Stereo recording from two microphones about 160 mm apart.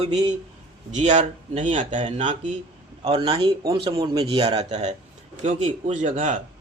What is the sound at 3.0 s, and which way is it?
Speech, 35° right (ahead or behind).